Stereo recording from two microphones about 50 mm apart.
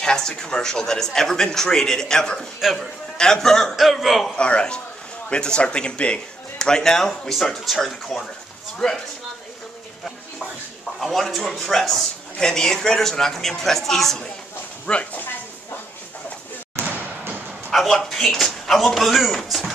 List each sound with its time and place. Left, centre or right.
0.0 s speech: centre
2.6 s a man's voice: centre
3.2 s speech: centre
3.7 s a man's voice: centre
4.4 s speech: centre
6.6 s speech: centre
11.0 s speech: centre
14.9 s speech: left
17.6 s a man's voice: centre